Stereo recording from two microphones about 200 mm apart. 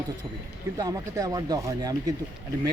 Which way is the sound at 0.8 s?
15° right (ahead or behind).